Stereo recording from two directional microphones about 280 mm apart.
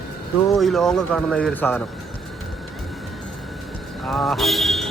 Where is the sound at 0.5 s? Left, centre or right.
Centre.